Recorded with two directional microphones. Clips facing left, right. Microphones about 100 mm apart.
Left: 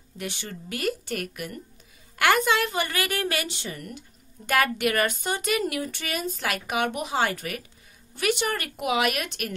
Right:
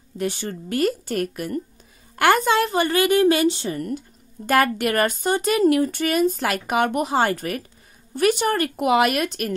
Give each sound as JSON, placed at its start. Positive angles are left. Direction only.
{"t": 0.2, "sound": "speech", "side_deg": -40}